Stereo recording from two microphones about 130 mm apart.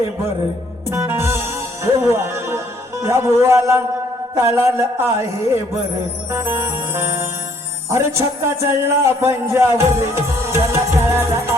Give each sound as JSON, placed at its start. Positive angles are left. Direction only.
{"t": 0.9, "sound": "music", "side_deg": -20}
{"t": 3.0, "sound": "a man's voice", "side_deg": -20}
{"t": 6.3, "sound": "a man's voice", "side_deg": -20}